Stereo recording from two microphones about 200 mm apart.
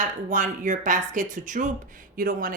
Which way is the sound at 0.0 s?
40° right (ahead or behind).